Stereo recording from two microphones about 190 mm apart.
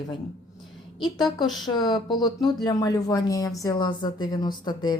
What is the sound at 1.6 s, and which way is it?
A woman's voice, 20° left (ahead or behind).